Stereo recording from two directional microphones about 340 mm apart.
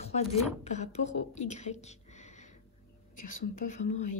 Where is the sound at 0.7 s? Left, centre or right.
Centre.